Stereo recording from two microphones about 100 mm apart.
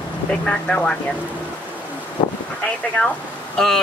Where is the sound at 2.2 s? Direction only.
50° left (ahead or behind).